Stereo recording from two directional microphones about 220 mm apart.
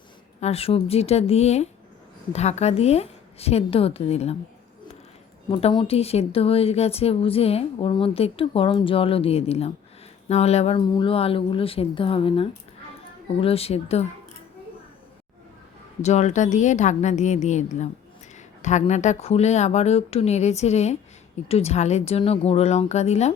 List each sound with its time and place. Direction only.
0.3 s speech: 30° left (ahead or behind)
5.5 s speech: 25° left (ahead or behind)
16.0 s a woman's voice: 30° left (ahead or behind)